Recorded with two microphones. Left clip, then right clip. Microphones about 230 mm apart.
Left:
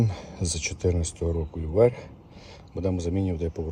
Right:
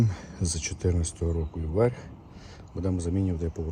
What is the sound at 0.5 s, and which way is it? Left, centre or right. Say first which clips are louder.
Speech: left 4 dB; left.